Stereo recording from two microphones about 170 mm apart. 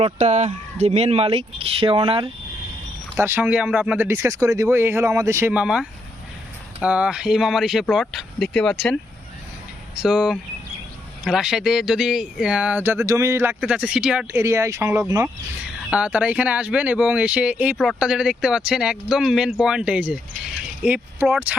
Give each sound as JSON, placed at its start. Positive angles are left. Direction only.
{"t": 0.0, "sound": "speech", "side_deg": -40}
{"t": 3.2, "sound": "speech", "side_deg": -10}
{"t": 10.0, "sound": "speech", "side_deg": -5}
{"t": 14.4, "sound": "speech", "side_deg": -15}